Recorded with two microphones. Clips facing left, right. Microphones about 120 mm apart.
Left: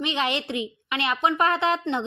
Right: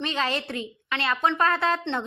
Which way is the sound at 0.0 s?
15° left (ahead or behind).